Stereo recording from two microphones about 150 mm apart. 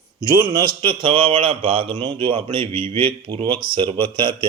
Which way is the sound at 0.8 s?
35° right (ahead or behind).